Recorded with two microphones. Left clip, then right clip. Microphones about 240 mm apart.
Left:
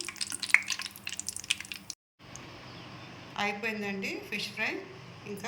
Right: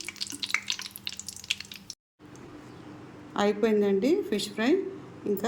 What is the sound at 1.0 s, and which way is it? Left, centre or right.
Drip, centre.